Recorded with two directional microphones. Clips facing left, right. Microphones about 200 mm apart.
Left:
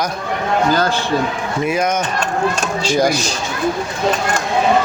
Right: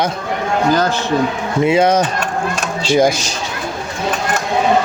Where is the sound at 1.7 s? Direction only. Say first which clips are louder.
Right 6 dB; 30° right (ahead or behind).